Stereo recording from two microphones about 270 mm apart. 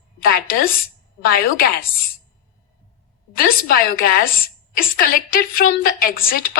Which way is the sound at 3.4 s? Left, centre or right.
Left.